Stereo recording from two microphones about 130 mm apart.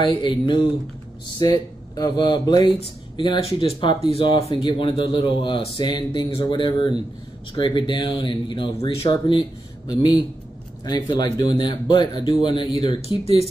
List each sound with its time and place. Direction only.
0.0 s speech: 40° left (ahead or behind)